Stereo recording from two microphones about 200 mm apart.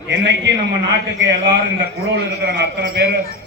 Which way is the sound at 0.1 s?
60° right (ahead or behind).